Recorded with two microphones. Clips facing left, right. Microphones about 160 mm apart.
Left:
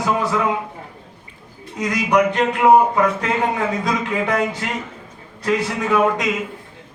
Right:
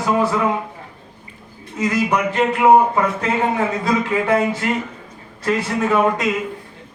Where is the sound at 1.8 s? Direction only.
5° right (ahead or behind).